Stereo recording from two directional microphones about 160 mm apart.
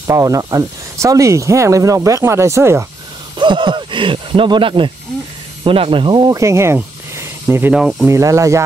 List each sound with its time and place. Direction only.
0.0 s speech: 20° right (ahead or behind)
3.3 s speech: 30° right (ahead or behind); by 8.1 s 5° right (ahead or behind)
8.1 s speech: 20° right (ahead or behind)